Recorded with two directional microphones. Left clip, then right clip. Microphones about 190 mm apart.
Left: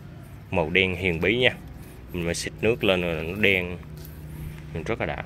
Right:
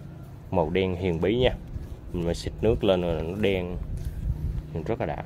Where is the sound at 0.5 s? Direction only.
20° right (ahead or behind).